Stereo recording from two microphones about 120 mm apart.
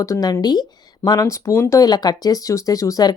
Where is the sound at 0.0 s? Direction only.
30° left (ahead or behind).